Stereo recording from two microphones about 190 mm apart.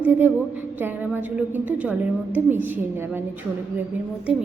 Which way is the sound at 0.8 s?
10° right (ahead or behind).